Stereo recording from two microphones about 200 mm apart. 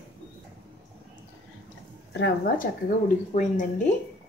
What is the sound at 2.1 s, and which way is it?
Speech, 60° left (ahead or behind).